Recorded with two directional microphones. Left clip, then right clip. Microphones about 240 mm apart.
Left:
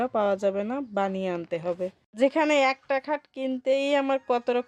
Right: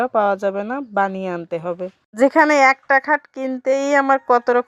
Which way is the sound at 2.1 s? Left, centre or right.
Right.